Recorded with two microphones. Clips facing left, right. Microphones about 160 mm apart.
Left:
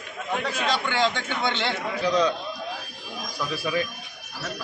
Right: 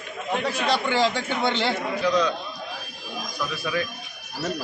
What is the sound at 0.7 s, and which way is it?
A man's voice, 10° right (ahead or behind).